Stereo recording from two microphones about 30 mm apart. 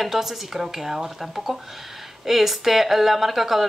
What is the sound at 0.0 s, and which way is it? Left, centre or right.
Speech, centre.